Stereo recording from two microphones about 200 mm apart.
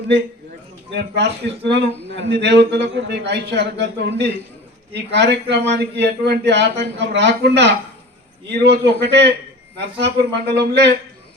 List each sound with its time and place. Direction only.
0.9 s speech: 60° right (ahead or behind)